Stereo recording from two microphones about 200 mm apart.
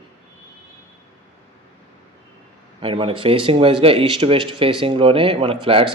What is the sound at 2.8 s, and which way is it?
Speech, 25° right (ahead or behind).